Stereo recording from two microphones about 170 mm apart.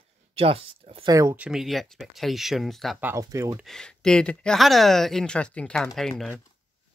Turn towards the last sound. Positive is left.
turn(degrees=0)  # may be behind; listen again after turning